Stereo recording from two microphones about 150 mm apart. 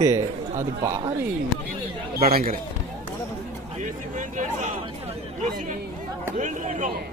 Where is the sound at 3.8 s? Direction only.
55° right (ahead or behind).